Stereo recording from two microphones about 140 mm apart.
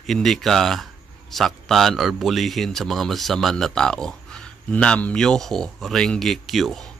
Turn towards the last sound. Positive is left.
turn(degrees=0)  # may be behind; listen again after turning